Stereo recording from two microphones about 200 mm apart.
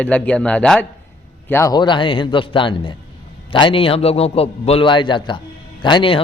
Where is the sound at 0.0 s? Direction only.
5° left (ahead or behind).